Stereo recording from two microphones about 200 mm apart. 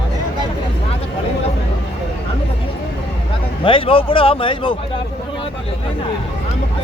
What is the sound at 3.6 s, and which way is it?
Speech, 25° left (ahead or behind).